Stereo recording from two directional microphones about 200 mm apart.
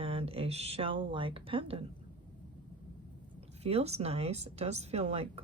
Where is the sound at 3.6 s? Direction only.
30° right (ahead or behind).